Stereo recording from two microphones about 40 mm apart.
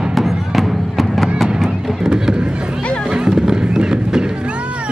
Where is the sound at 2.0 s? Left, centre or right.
Centre.